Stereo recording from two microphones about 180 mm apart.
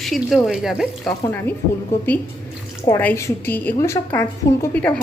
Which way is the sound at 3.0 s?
15° left (ahead or behind).